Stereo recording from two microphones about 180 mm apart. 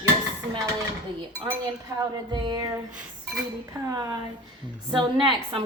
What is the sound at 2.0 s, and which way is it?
Speech, 25° right (ahead or behind).